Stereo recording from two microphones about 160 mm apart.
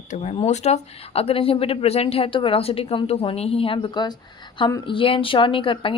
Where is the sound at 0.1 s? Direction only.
40° left (ahead or behind).